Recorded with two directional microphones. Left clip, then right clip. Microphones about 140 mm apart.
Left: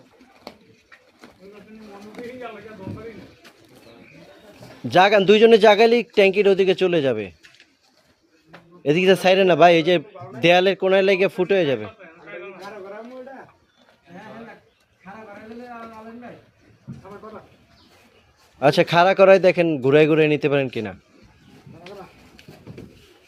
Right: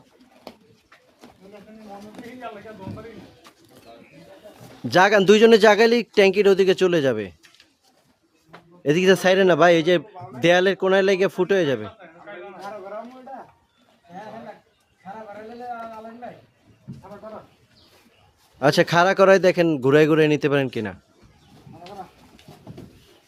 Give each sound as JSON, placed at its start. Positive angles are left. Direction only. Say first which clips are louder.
{"t": 4.9, "sound": "speech", "louder": "left 1 dB", "side_deg": -20}
{"t": 8.8, "sound": "a man's voice", "louder": "left 1 dB", "side_deg": -20}
{"t": 18.6, "sound": "speech", "louder": "left 2 dB", "side_deg": -20}
{"t": 22.5, "sound": "a sound", "louder": "even", "side_deg": 10}